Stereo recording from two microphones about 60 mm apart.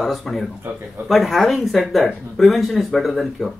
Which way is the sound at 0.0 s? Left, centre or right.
Centre.